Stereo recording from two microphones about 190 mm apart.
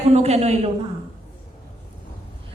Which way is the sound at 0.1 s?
35° right (ahead or behind).